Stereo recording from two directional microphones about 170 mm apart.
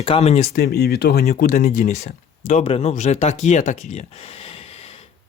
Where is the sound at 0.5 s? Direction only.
65° left (ahead or behind).